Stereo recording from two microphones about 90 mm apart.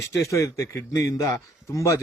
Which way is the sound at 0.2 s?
35° left (ahead or behind).